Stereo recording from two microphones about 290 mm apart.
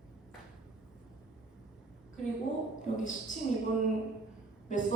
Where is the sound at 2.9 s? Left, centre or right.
Left.